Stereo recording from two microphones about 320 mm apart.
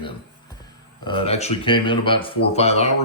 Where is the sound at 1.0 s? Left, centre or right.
Centre.